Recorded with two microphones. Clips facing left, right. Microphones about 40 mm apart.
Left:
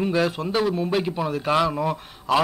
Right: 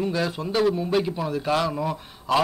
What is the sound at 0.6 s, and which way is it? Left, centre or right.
Speech, centre.